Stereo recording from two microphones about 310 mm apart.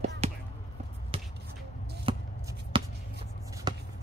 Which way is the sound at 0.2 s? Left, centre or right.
Centre.